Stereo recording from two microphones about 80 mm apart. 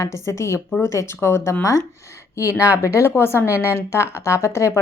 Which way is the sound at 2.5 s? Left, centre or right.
Centre.